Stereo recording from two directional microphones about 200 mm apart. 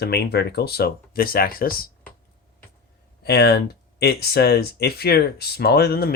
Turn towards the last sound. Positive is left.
turn(degrees=50)  # may be behind; listen again after turning